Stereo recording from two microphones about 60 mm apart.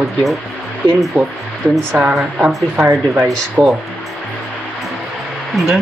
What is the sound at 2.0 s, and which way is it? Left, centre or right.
Speech, right.